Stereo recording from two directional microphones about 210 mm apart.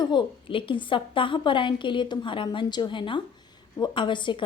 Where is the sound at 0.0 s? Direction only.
20° left (ahead or behind).